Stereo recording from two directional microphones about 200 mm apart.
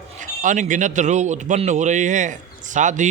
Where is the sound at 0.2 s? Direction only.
40° right (ahead or behind).